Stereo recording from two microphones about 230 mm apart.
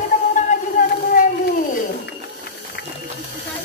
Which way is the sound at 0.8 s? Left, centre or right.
Left.